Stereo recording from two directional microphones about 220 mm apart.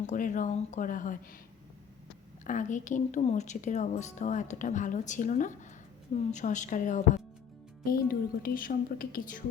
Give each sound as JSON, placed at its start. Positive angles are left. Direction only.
{"t": 0.0, "sound": "speech", "side_deg": 35}
{"t": 2.4, "sound": "speech", "side_deg": 35}